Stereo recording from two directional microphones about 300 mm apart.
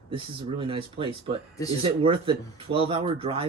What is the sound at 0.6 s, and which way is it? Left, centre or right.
Speech, centre.